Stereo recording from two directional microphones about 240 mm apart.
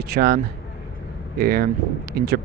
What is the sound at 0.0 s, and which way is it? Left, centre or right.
Speech, right.